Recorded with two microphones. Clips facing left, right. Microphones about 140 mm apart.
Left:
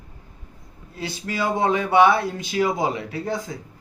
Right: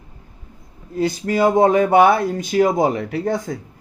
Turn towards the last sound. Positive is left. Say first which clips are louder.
# right 6 dB
turn(degrees=-55)  # may be behind; listen again after turning